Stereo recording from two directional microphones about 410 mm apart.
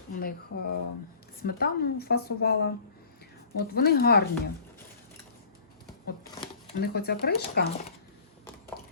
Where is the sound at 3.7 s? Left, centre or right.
Left.